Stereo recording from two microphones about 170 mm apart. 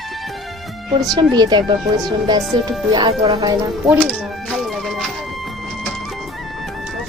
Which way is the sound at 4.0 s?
5° left (ahead or behind).